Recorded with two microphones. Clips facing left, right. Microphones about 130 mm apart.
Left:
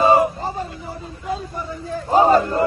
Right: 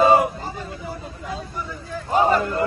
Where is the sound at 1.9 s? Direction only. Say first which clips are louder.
Left 4 dB; 35° left (ahead or behind).